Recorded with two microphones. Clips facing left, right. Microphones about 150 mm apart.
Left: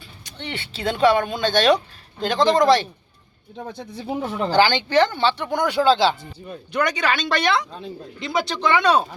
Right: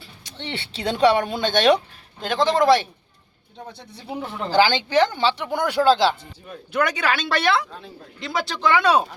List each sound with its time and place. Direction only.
0.3 s speech: 25° right (ahead or behind)
2.2 s speech: 5° right (ahead or behind)
4.1 s speech: 45° left (ahead or behind)
4.5 s speech: 10° right (ahead or behind)